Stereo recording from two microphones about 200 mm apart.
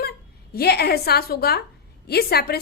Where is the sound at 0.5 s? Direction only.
50° left (ahead or behind).